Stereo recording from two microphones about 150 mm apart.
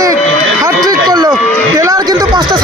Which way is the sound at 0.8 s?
25° right (ahead or behind).